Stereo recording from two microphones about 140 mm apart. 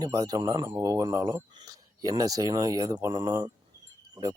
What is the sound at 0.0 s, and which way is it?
Speech, 25° right (ahead or behind).